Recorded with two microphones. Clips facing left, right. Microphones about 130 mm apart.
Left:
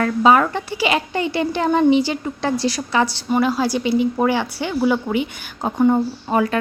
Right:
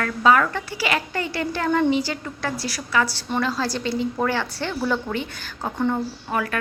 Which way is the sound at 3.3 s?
15° left (ahead or behind).